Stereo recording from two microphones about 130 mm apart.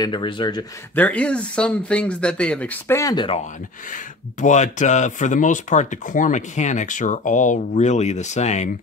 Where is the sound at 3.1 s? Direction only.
45° left (ahead or behind).